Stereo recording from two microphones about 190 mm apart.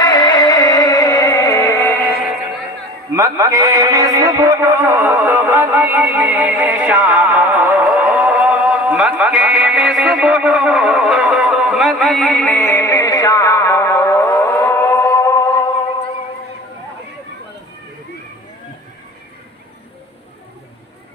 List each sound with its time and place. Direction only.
0.0 s music: 25° left (ahead or behind)
3.1 s music: 15° right (ahead or behind); by 15.7 s 20° left (ahead or behind)